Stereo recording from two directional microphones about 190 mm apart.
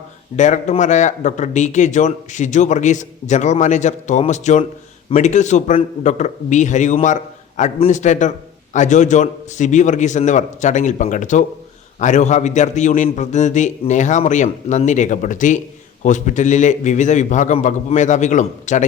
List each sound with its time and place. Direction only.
0.3 s speech: 40° left (ahead or behind)